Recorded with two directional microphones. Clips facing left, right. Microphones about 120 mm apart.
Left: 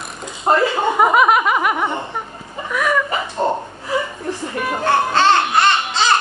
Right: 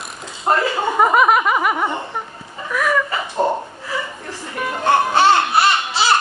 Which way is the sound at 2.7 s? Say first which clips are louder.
Even; centre (ahead or behind).